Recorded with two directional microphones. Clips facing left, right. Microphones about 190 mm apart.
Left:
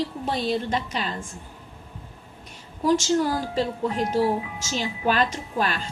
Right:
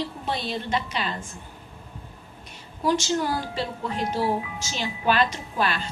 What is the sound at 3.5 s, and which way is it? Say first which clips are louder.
A woman's voice: left 4 dB; 40° left (ahead or behind).